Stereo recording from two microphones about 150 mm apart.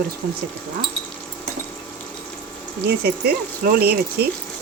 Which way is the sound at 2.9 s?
90° right.